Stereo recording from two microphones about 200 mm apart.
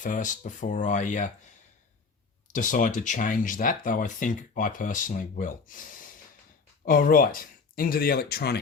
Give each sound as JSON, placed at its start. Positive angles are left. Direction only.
{"t": 0.0, "sound": "speech", "side_deg": 40}